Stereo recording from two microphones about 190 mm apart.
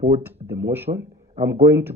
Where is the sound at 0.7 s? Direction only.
10° right (ahead or behind).